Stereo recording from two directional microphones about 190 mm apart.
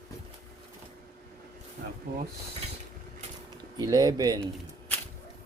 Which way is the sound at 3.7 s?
20° right (ahead or behind).